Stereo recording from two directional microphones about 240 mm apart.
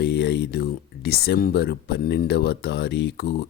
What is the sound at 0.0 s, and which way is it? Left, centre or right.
Speech, left.